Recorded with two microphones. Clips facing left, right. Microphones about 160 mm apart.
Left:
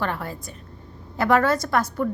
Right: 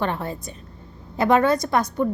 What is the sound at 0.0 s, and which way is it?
A woman's voice, 20° right (ahead or behind).